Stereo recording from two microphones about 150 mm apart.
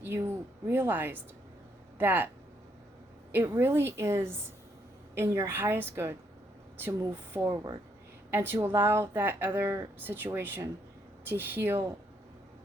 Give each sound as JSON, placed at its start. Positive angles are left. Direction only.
{"t": 0.0, "sound": "speech", "side_deg": -15}
{"t": 3.3, "sound": "speech", "side_deg": -15}